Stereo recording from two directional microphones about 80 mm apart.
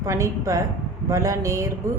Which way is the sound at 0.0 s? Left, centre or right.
Right.